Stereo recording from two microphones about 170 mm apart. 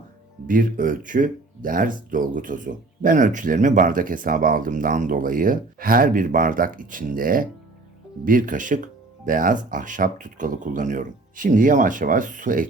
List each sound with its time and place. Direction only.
0.4 s speech: 55° right (ahead or behind)